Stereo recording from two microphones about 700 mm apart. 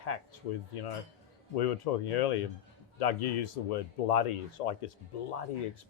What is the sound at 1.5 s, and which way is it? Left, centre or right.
Speech, left.